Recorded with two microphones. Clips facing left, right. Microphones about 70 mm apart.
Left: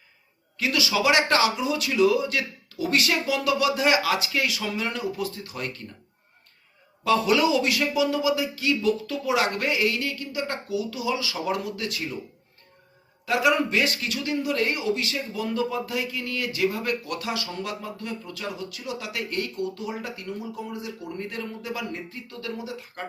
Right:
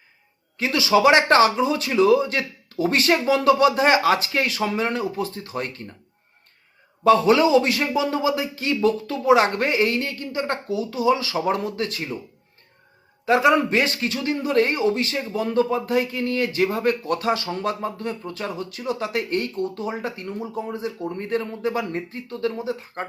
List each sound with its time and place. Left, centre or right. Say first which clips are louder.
0.5 s speech: right 6 dB; right
7.0 s speech: right 5 dB; right
13.2 s speech: right 5 dB; right